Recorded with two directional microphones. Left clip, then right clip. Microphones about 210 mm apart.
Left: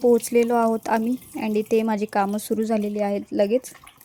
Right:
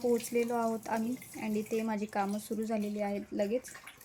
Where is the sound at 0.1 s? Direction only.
45° left (ahead or behind).